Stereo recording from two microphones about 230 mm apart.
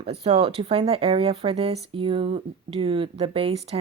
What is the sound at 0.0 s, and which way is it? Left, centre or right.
A woman's voice, right.